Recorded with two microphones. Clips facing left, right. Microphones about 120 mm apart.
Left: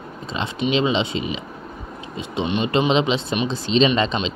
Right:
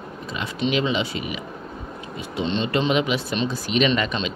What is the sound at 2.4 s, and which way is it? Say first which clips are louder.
Speech: left 1 dB; 10° left (ahead or behind).